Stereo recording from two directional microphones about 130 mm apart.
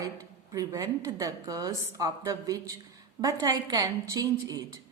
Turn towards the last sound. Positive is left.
turn(degrees=-30)  # may be behind; listen again after turning